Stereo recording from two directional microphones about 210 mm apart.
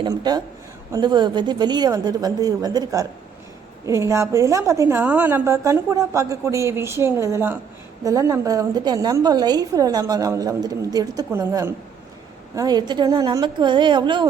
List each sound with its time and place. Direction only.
0.0 s a woman's voice: 20° right (ahead or behind)